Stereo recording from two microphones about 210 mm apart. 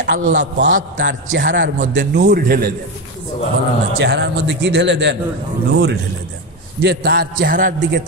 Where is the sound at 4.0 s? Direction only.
55° right (ahead or behind).